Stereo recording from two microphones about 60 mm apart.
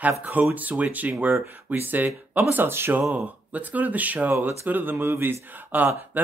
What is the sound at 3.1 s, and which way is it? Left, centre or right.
Speech, right.